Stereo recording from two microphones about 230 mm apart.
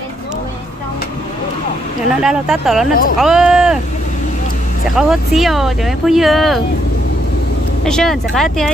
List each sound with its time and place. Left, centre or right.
2.2 s speech: centre
4.9 s speech: centre
7.8 s speech: centre